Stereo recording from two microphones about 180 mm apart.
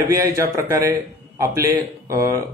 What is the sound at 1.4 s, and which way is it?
Speech, 15° right (ahead or behind).